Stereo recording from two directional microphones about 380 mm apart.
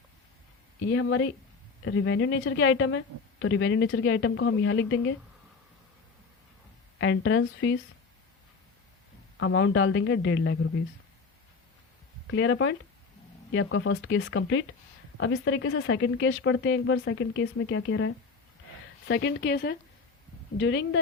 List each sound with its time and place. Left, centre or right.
0.9 s a woman's voice: left
7.0 s a woman's voice: left
9.4 s a woman's voice: left
12.3 s a woman's voice: left